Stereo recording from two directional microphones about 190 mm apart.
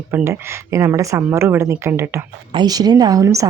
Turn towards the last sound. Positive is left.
turn(degrees=-15)  # may be behind; listen again after turning